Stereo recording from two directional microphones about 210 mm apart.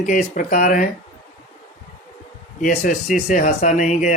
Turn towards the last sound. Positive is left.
turn(degrees=35)  # may be behind; listen again after turning